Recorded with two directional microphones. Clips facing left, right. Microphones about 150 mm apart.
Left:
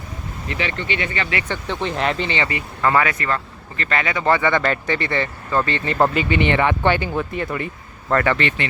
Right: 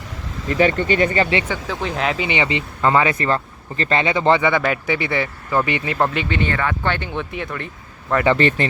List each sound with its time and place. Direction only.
0.4 s speech: 45° right (ahead or behind)
1.5 s speech: 5° right (ahead or behind)
2.3 s speech: 20° right (ahead or behind)
4.4 s speech: 10° right (ahead or behind)
5.9 s speech: 5° left (ahead or behind)
8.4 s speech: 40° right (ahead or behind)